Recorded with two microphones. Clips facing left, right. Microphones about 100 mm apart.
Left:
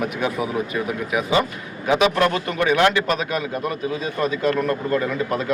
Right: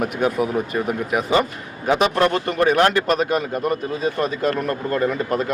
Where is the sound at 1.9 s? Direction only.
35° right (ahead or behind).